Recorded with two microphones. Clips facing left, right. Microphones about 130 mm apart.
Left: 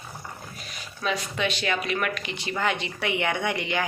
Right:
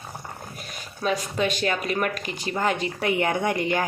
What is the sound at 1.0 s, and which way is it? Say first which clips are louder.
Speech: right 3 dB; 45° right (ahead or behind).